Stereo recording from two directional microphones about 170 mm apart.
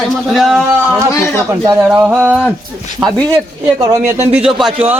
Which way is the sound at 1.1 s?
15° left (ahead or behind).